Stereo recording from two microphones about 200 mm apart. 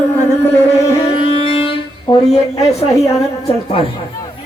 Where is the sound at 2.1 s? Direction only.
25° left (ahead or behind).